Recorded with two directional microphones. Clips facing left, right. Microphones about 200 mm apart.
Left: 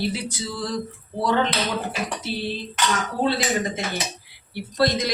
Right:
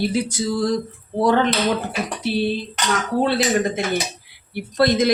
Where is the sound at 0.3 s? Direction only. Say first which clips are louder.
Right 8 dB; 45° right (ahead or behind).